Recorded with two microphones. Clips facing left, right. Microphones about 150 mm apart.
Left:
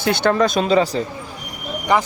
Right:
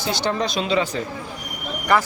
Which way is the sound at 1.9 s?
15° left (ahead or behind).